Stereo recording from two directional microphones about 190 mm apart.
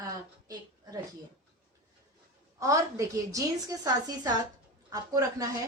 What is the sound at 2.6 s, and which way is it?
A woman's voice, 15° right (ahead or behind).